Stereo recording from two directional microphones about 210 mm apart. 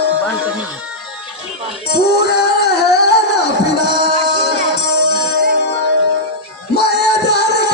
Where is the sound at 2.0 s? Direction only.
50° left (ahead or behind).